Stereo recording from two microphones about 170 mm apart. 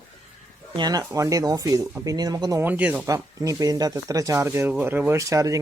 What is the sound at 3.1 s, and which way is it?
Speech, 20° right (ahead or behind).